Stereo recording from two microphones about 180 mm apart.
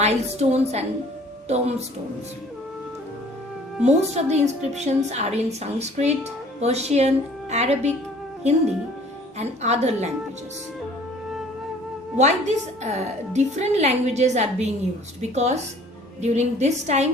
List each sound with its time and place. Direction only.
0.0 s a woman's voice: 40° right (ahead or behind)
3.8 s a woman's voice: 40° right (ahead or behind)
9.4 s a woman's voice: 35° right (ahead or behind)
12.1 s a woman's voice: 40° right (ahead or behind)